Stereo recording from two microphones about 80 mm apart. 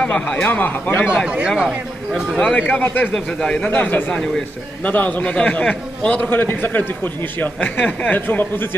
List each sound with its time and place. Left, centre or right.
0.0 s a man's voice: centre
1.0 s speech: centre
2.3 s a man's voice: centre
2.6 s a man's voice: left